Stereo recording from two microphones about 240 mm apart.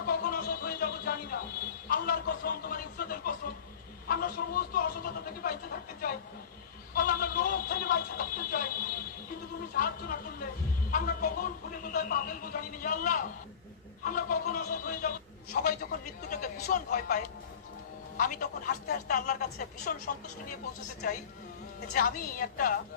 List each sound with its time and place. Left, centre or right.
0.0 s music: left
4.1 s speech: left
9.7 s speech: left
18.2 s speech: left
21.8 s speech: left